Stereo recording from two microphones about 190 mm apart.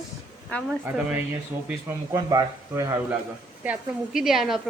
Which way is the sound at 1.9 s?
20° right (ahead or behind).